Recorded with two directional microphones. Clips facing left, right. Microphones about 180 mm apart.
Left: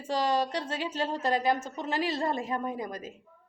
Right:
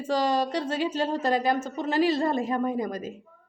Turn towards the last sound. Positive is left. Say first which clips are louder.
# right 6 dB
turn(degrees=-40)  # may be behind; listen again after turning